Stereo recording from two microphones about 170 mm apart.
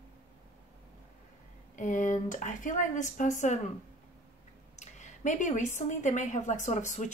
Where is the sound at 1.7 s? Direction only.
50° left (ahead or behind).